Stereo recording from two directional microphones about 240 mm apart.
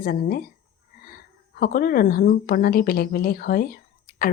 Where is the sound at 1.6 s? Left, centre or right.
Left.